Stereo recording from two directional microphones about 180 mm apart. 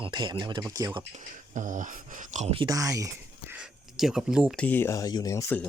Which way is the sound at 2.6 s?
20° right (ahead or behind).